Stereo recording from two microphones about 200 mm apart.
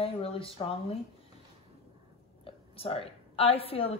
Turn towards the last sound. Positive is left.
turn(degrees=30)  # may be behind; listen again after turning